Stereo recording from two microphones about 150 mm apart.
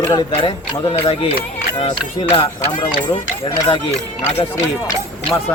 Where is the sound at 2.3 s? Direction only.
25° left (ahead or behind).